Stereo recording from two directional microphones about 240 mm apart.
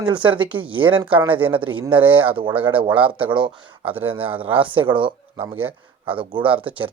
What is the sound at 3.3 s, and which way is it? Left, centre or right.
Speech, centre.